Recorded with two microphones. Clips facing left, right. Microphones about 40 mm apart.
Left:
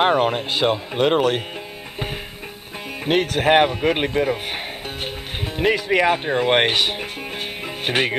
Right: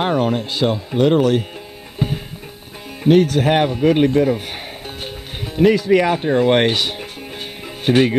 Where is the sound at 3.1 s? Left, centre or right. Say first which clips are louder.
Right 4 dB; left.